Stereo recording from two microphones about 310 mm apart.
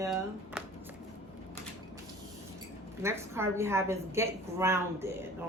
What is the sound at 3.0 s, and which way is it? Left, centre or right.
A woman's voice, centre.